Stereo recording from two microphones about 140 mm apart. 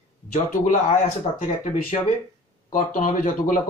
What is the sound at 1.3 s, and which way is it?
Speech, 45° left (ahead or behind).